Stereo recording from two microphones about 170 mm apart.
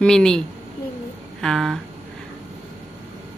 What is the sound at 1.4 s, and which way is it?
Speech, centre (ahead or behind).